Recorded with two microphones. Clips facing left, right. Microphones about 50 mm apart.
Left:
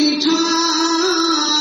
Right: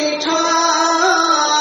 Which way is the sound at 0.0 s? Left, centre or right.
Right.